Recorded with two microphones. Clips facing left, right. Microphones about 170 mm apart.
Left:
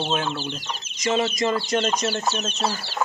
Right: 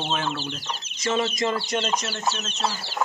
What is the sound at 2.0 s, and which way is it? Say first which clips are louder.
Speech: left 4 dB; 35° left (ahead or behind).